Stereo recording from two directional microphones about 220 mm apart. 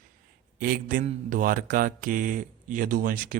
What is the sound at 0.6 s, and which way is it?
A man's voice, 40° right (ahead or behind).